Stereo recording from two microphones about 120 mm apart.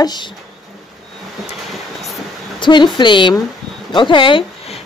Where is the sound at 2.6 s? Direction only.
40° left (ahead or behind).